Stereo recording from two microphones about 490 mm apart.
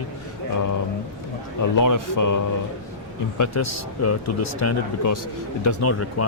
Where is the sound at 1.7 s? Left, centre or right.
Left.